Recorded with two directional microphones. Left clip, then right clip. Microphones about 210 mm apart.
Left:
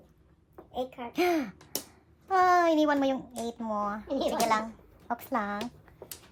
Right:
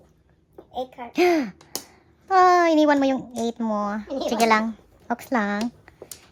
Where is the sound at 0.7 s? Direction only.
10° right (ahead or behind).